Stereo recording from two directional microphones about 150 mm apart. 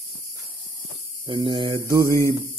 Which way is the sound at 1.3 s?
35° right (ahead or behind).